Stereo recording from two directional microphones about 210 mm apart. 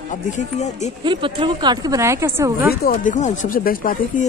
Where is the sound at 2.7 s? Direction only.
40° left (ahead or behind).